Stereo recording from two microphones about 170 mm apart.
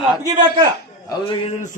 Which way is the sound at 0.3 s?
25° right (ahead or behind).